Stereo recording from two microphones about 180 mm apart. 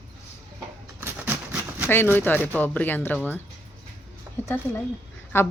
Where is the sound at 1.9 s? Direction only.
10° left (ahead or behind).